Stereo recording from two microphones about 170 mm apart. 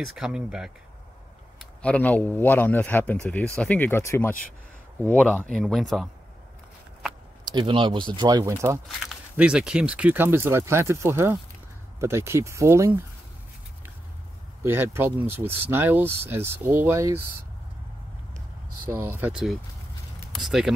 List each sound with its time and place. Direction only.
0.0 s speech: centre (ahead or behind)
1.6 s speech: 5° left (ahead or behind)
7.4 s speech: 25° right (ahead or behind)
8.8 s speech: centre (ahead or behind)
14.6 s speech: 15° right (ahead or behind)
18.9 s speech: 15° right (ahead or behind)